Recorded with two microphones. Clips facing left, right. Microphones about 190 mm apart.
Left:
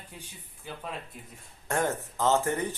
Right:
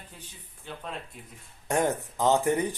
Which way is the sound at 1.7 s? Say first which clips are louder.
Right 3 dB; 15° right (ahead or behind).